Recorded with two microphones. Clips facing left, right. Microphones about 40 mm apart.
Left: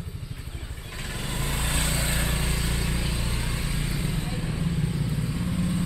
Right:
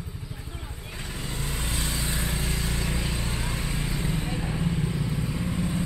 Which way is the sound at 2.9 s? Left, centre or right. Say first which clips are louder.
Even; centre.